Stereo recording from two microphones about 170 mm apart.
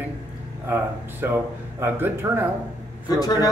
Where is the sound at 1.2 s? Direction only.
15° right (ahead or behind).